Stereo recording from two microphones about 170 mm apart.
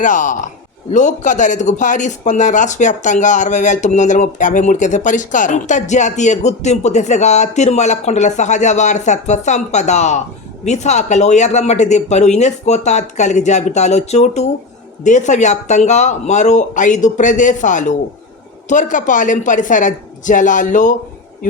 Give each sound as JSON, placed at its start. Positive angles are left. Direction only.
{"t": 0.0, "sound": "a man's voice", "side_deg": 50}